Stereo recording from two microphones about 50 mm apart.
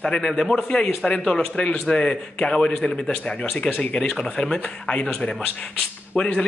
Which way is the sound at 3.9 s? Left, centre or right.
Centre.